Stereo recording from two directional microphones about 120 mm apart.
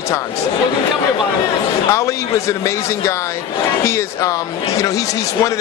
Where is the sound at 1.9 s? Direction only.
25° left (ahead or behind).